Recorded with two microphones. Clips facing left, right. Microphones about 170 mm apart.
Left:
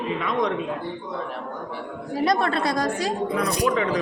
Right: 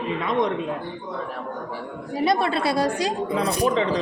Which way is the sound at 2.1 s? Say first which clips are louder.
Even; 5° right (ahead or behind).